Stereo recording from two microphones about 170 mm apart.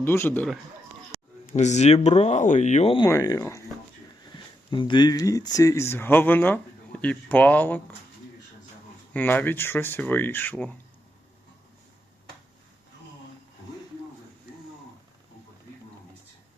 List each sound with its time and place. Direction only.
0.0 s speech: 15° left (ahead or behind)
1.5 s speech: 45° left (ahead or behind)
3.1 s speech: 20° left (ahead or behind)
4.7 s speech: 30° left (ahead or behind); by 7.9 s 10° left (ahead or behind)
9.1 s speech: 10° left (ahead or behind)